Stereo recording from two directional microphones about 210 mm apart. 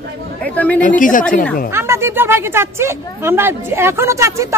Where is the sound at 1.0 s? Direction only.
40° left (ahead or behind).